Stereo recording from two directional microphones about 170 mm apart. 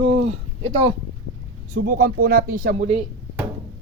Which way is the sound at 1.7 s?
55° right (ahead or behind).